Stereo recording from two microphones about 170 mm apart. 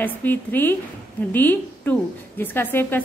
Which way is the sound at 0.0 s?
10° left (ahead or behind).